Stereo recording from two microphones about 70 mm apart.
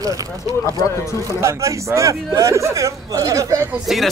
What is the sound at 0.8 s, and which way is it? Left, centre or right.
Speech, left.